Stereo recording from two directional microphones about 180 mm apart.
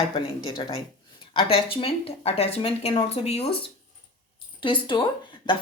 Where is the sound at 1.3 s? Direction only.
30° left (ahead or behind).